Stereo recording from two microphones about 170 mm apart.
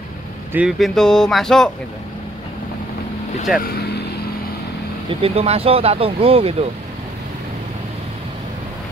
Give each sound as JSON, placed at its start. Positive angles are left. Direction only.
{"t": 0.5, "sound": "speech", "side_deg": -5}
{"t": 3.7, "sound": "speech", "side_deg": 70}
{"t": 5.2, "sound": "speech", "side_deg": -35}